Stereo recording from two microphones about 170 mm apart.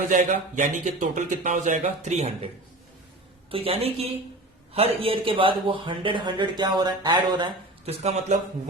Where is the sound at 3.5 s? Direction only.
35° right (ahead or behind).